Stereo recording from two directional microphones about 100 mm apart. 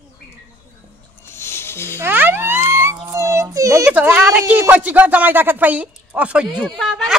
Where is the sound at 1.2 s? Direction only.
25° left (ahead or behind).